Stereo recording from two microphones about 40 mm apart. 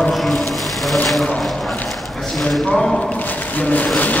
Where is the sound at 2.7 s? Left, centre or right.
Centre.